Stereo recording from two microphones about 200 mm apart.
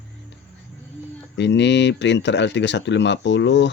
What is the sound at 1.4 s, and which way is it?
Speech, 60° left (ahead or behind).